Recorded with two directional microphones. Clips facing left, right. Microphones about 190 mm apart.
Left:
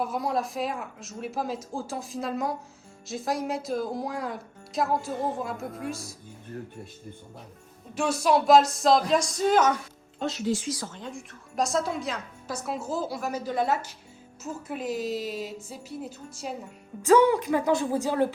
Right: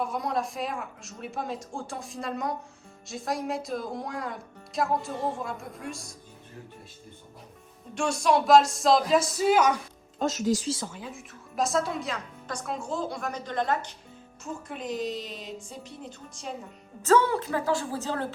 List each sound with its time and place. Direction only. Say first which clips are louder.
0.0 s speech: left 1 dB; centre (ahead or behind)
7.9 s speech: left 1 dB; 5° left (ahead or behind)
10.2 s speech: right 2 dB; 45° right (ahead or behind)
10.9 s a woman's voice: left 2 dB; 5° right (ahead or behind); by 18.3 s 15° left (ahead or behind)